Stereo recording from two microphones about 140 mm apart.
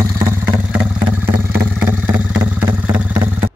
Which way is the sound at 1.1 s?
15° right (ahead or behind).